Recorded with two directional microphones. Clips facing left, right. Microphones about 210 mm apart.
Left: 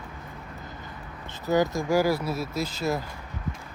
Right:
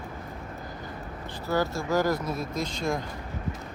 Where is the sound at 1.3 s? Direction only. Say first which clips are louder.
Left 4 dB; 20° left (ahead or behind).